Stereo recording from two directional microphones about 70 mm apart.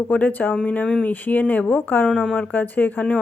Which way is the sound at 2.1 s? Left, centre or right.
Centre.